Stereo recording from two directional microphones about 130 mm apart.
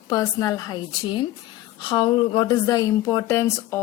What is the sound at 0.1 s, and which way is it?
A woman's voice, 30° left (ahead or behind).